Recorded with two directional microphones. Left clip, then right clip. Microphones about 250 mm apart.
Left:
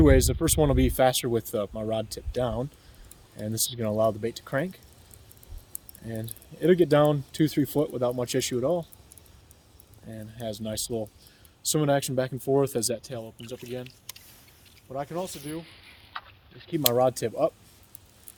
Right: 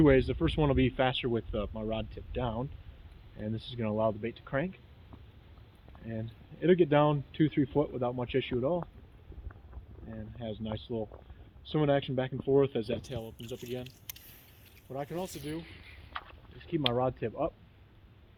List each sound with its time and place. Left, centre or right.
0.0 s speech: left
6.1 s speech: left
10.3 s speech: left
14.9 s speech: left